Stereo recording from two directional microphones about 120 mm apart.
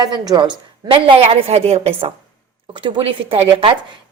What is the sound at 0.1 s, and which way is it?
A woman's voice, 35° right (ahead or behind).